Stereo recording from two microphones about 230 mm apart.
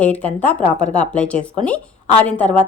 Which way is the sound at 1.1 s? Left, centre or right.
Centre.